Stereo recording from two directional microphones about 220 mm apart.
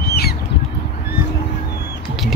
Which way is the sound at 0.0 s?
45° left (ahead or behind).